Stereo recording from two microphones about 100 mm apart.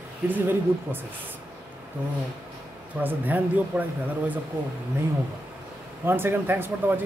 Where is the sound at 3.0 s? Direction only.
15° right (ahead or behind).